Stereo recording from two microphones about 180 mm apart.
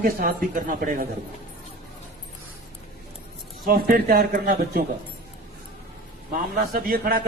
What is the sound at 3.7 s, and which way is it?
Speech, 55° right (ahead or behind).